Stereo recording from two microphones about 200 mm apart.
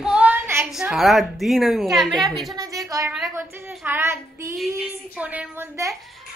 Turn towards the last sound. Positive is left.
turn(degrees=-15)  # may be behind; listen again after turning